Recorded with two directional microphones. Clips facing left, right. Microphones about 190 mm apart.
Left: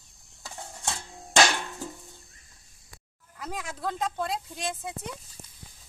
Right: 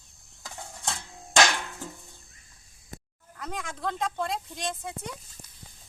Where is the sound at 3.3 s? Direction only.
5° left (ahead or behind).